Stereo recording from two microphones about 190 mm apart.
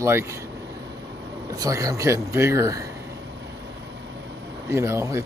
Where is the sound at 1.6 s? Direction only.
20° right (ahead or behind).